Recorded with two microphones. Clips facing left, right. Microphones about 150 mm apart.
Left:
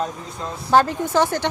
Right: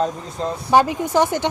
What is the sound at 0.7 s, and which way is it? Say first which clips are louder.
Speech: right 1 dB; 15° right (ahead or behind).